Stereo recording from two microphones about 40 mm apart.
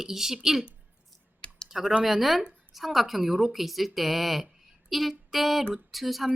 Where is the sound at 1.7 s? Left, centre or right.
Centre.